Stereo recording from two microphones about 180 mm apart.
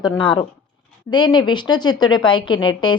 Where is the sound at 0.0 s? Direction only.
25° left (ahead or behind).